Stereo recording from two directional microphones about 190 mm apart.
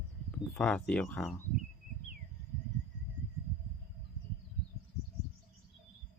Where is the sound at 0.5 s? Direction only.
5° left (ahead or behind).